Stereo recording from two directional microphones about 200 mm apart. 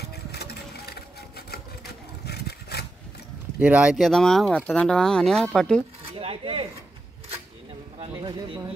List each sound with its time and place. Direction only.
0.1 s sewing machine: 55° left (ahead or behind)
2.2 s a sound: 50° left (ahead or behind)
3.5 s speech: 5° right (ahead or behind)
6.1 s speech: 25° right (ahead or behind)
8.2 s speech: 20° right (ahead or behind)